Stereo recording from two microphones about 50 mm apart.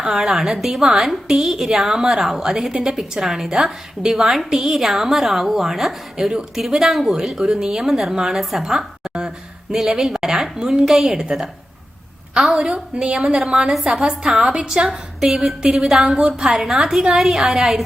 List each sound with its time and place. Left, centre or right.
0.0 s a woman's voice: centre
9.0 s a sound: centre
9.7 s a woman's voice: right